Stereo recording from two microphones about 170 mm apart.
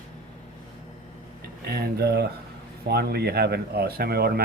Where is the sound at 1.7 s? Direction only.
65° right (ahead or behind).